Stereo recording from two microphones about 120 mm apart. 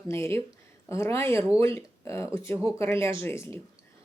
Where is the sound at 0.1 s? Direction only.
20° left (ahead or behind).